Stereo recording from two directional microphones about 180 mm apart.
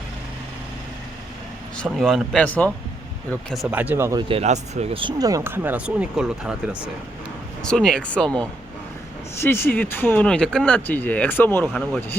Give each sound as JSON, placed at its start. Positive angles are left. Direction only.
{"t": 1.7, "sound": "speech", "side_deg": 0}
{"t": 3.5, "sound": "speech", "side_deg": -5}
{"t": 4.3, "sound": "speech", "side_deg": -35}
{"t": 7.6, "sound": "speech", "side_deg": 5}
{"t": 9.4, "sound": "speech", "side_deg": 15}